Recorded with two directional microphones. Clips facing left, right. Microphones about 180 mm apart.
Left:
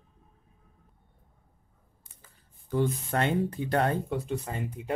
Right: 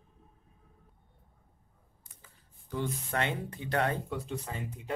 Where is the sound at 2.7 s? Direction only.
45° left (ahead or behind).